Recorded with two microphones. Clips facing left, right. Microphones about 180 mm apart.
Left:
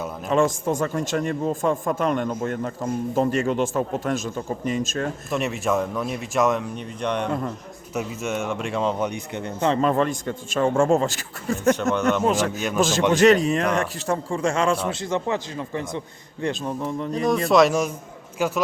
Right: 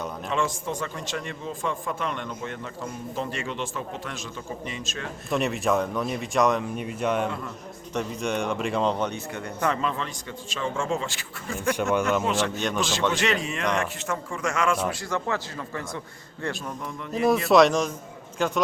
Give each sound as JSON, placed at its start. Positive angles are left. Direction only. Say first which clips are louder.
{"t": 0.3, "sound": "a man's voice", "louder": "left 8 dB", "side_deg": 45}
{"t": 5.3, "sound": "speech", "louder": "right 1 dB", "side_deg": 0}
{"t": 7.3, "sound": "a man's voice", "louder": "left 6 dB", "side_deg": 45}
{"t": 7.9, "sound": "speech", "louder": "left 1 dB", "side_deg": 5}
{"t": 9.8, "sound": "a man's voice", "louder": "left 9 dB", "side_deg": 50}
{"t": 12.5, "sound": "speech", "louder": "left 2 dB", "side_deg": 5}
{"t": 13.1, "sound": "a man's voice", "louder": "left 10 dB", "side_deg": 40}
{"t": 16.6, "sound": "speech", "louder": "left 8 dB", "side_deg": 30}
{"t": 17.2, "sound": "a man's voice", "louder": "even", "side_deg": 0}